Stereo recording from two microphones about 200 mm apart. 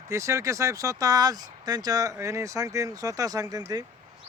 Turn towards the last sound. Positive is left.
turn(degrees=-20)  # may be behind; listen again after turning